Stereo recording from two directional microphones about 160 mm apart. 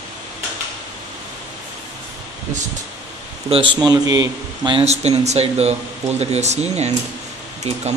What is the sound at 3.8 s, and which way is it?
Speech, 25° right (ahead or behind).